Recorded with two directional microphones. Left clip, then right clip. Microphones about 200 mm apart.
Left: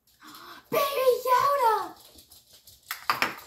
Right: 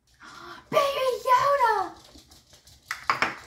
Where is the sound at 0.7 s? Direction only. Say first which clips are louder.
Even; 10° right (ahead or behind).